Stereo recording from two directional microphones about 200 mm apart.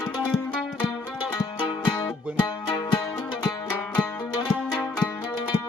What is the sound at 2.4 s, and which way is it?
Music, 20° left (ahead or behind).